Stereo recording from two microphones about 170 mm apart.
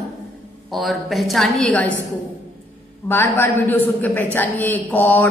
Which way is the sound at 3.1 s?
10° left (ahead or behind).